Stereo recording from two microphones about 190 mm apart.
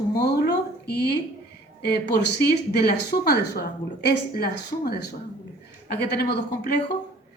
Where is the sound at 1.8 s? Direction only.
65° left (ahead or behind).